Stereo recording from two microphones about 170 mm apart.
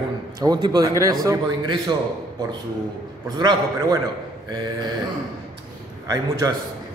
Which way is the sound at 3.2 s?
25° right (ahead or behind).